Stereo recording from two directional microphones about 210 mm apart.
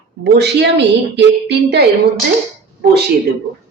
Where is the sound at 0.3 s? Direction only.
55° right (ahead or behind).